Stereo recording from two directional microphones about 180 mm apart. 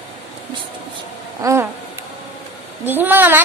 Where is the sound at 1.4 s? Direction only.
15° right (ahead or behind).